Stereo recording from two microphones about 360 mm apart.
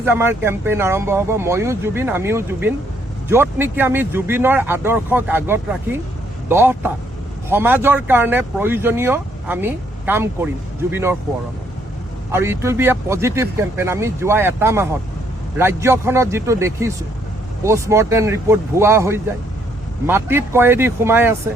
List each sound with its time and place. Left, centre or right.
0.0 s speech: centre
12.3 s speech: centre